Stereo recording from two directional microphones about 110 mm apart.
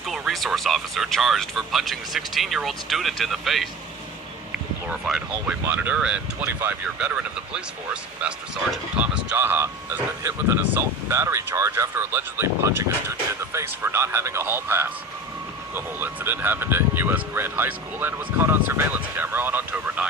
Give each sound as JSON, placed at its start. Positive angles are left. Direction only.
{"t": 0.0, "sound": "speech", "side_deg": 0}
{"t": 4.9, "sound": "speech", "side_deg": -5}
{"t": 6.4, "sound": "speech", "side_deg": -20}